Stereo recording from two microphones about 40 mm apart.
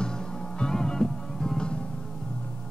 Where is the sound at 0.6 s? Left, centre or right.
Centre.